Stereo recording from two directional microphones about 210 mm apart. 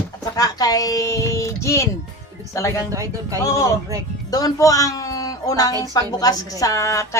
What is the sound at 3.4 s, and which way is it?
A woman's voice, 15° left (ahead or behind).